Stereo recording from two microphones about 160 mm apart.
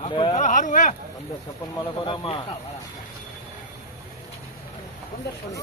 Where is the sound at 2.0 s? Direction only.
35° left (ahead or behind).